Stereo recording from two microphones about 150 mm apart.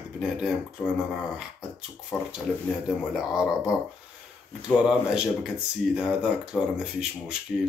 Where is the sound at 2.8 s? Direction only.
5° right (ahead or behind).